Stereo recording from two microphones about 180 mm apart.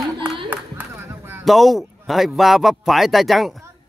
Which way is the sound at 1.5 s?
Centre (ahead or behind).